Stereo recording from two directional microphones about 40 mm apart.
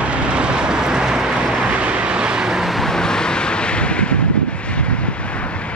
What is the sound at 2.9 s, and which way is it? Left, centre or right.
Vehicle, centre.